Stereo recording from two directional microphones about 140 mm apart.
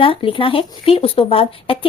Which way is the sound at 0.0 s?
40° left (ahead or behind).